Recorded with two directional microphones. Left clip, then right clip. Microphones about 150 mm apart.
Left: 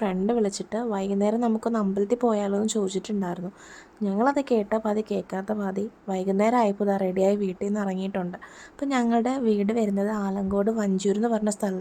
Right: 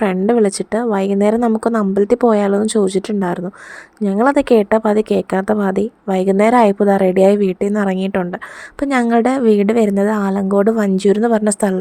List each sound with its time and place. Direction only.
0.0 s a woman's voice: 40° right (ahead or behind)